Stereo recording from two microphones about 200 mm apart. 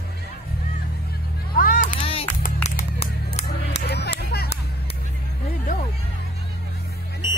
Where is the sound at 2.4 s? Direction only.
45° left (ahead or behind).